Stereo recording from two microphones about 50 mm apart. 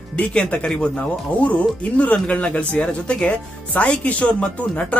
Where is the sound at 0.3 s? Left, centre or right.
Left.